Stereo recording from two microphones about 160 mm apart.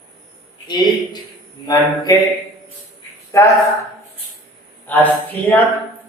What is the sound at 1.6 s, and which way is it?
Speech, 25° left (ahead or behind).